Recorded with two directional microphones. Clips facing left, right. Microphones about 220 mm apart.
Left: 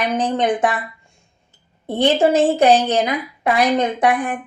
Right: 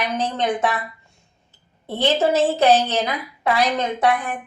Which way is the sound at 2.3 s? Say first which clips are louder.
Left 3 dB; 15° left (ahead or behind).